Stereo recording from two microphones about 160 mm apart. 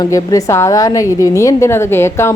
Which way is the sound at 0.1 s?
20° left (ahead or behind).